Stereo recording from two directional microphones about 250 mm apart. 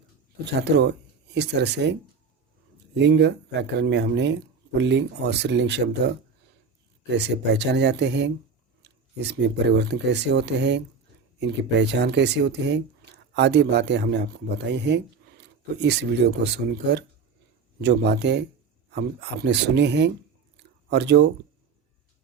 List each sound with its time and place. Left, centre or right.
0.6 s speech: right
7.1 s speech: right
17.7 s speech: right